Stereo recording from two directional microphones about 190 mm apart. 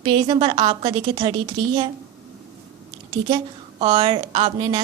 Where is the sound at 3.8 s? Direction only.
25° right (ahead or behind).